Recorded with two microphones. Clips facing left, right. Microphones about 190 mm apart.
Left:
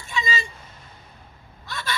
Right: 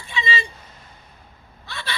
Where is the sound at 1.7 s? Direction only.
45° left (ahead or behind).